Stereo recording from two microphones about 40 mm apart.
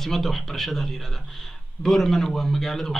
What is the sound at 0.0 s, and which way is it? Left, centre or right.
Speech, centre.